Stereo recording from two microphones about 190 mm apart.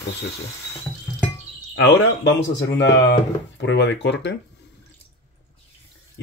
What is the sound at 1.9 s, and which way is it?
Speech, 65° left (ahead or behind).